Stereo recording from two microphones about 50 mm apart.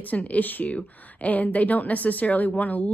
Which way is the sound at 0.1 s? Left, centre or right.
Left.